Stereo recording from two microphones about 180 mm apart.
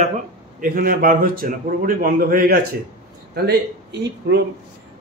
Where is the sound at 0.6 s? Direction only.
55° right (ahead or behind).